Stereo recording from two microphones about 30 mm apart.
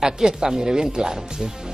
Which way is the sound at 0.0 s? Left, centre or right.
Right.